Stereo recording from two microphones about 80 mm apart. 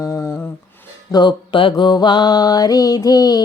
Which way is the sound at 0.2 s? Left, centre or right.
Left.